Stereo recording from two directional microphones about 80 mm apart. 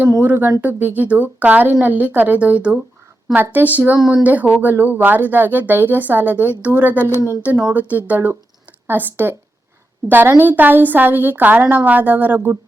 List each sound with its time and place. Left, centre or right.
0.2 s speech: right